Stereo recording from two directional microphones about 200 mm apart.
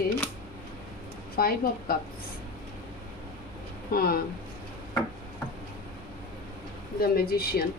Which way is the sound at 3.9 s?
50° left (ahead or behind).